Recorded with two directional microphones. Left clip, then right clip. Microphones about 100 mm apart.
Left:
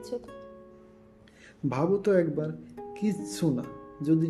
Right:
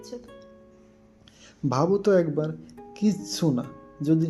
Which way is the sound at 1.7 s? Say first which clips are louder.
Right 4 dB; 30° right (ahead or behind).